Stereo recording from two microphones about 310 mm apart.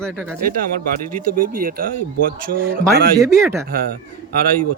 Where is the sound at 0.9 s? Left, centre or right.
Right.